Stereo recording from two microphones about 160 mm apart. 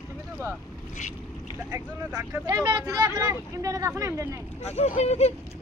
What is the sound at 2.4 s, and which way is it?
Speech, 25° right (ahead or behind).